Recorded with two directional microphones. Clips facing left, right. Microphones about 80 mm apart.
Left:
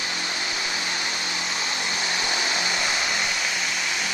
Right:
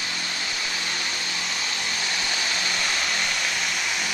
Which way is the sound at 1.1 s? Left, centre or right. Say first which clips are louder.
Left 2 dB; left.